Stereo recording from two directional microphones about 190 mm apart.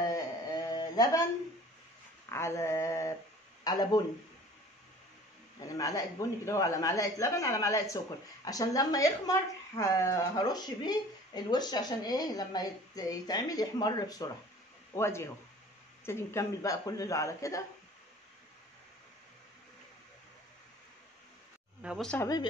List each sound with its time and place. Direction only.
0.1 s a sound: 20° left (ahead or behind)
2.2 s a woman's voice: 15° left (ahead or behind)
5.8 s a woman's voice: 15° left (ahead or behind)
21.8 s speech: centre (ahead or behind)
22.2 s a woman's voice: 20° left (ahead or behind)